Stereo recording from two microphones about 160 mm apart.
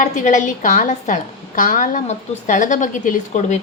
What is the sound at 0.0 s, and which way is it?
A woman's voice, 50° left (ahead or behind).